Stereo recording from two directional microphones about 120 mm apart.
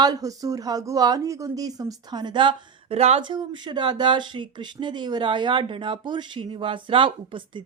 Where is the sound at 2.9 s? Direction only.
60° right (ahead or behind).